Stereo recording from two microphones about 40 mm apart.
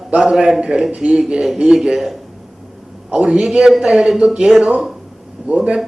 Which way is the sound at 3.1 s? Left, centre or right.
Right.